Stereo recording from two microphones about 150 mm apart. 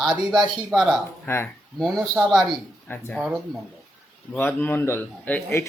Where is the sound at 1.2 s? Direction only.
15° left (ahead or behind).